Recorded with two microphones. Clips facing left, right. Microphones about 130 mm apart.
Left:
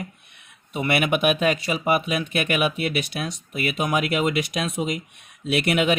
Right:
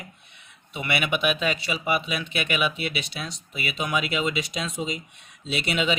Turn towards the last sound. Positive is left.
turn(degrees=55)  # may be behind; listen again after turning